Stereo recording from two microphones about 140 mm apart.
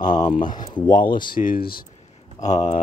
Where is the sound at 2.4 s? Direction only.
60° left (ahead or behind).